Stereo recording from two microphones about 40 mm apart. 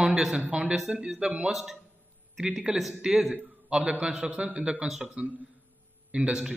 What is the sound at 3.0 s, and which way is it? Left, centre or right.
A man's voice, centre.